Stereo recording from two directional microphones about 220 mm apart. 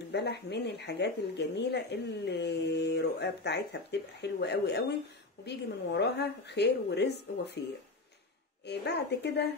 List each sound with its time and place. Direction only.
0.1 s speech: 50° left (ahead or behind)
8.6 s speech: 50° left (ahead or behind)